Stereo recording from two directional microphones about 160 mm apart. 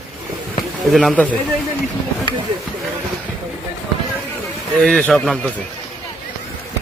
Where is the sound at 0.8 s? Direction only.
Centre (ahead or behind).